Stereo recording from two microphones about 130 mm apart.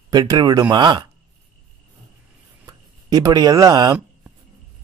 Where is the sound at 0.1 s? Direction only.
30° right (ahead or behind).